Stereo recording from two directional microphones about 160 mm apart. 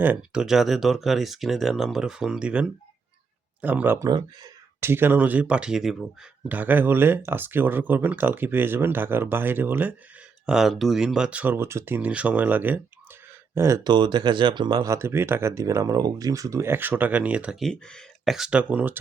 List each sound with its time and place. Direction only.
0.0 s speech: 10° right (ahead or behind)